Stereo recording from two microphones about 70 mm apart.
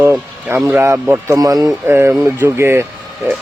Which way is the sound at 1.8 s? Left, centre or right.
Right.